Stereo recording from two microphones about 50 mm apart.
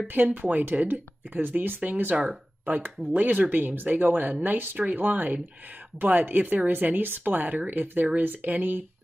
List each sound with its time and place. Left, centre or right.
0.1 s speech: right
3.2 s speech: right